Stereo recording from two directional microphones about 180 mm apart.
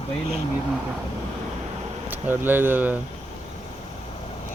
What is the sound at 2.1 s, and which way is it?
Speech, 10° right (ahead or behind).